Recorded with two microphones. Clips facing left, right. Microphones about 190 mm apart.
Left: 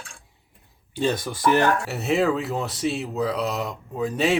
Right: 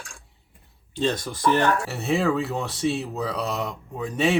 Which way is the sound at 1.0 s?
10° left (ahead or behind).